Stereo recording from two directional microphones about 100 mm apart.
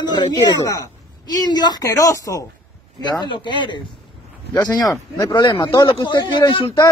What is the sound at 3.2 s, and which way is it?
Speech, 50° left (ahead or behind).